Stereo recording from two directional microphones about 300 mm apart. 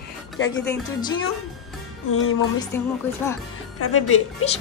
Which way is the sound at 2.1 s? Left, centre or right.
Left.